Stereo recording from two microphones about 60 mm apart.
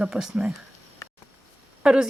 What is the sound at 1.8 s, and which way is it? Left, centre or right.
Speech, centre.